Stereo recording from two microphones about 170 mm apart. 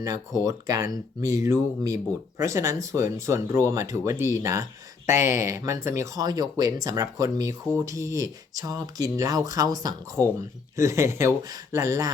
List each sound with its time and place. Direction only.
0.0 s speech: 20° right (ahead or behind)